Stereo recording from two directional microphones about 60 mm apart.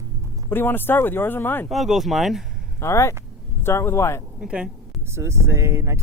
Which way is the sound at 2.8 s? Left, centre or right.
Left.